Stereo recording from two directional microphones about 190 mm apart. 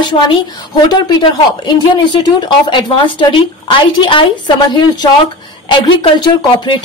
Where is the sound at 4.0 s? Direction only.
25° left (ahead or behind).